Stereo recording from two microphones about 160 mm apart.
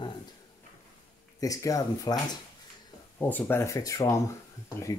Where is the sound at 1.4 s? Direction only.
20° left (ahead or behind).